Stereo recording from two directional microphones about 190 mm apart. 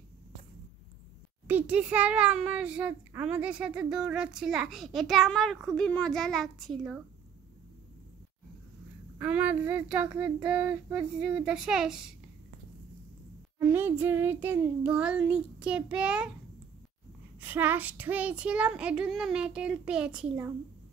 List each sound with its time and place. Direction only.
1.5 s a child's voice: 5° right (ahead or behind)
9.2 s child singing: 5° right (ahead or behind)
13.6 s child singing: 10° right (ahead or behind)
17.4 s a child's voice: 10° right (ahead or behind)